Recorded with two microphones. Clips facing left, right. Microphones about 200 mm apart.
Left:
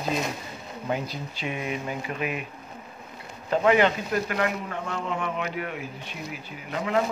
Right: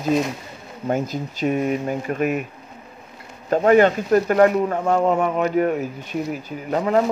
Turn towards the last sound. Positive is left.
turn(degrees=-40)  # may be behind; listen again after turning